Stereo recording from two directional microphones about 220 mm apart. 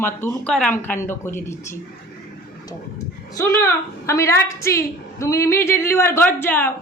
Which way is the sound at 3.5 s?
15° left (ahead or behind).